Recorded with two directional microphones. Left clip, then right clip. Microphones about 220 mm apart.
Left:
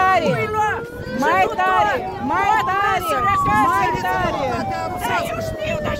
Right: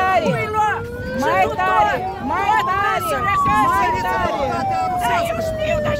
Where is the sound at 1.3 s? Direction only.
40° left (ahead or behind).